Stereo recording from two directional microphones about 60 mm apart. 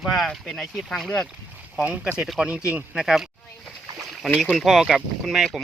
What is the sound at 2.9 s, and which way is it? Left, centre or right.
Speech, centre.